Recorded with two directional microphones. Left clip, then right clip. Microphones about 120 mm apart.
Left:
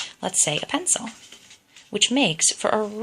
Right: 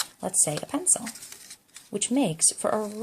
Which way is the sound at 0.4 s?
15° right (ahead or behind).